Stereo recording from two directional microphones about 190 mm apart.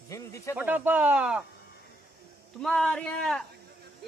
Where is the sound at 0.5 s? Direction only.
10° right (ahead or behind).